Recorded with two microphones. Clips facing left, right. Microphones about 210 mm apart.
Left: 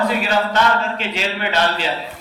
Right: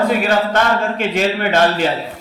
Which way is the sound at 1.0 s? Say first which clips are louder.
Right 6 dB; 50° right (ahead or behind).